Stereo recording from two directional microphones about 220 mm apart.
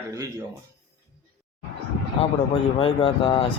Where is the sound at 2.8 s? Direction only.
25° left (ahead or behind).